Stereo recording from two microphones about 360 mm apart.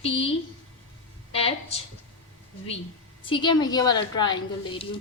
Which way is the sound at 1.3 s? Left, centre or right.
Centre.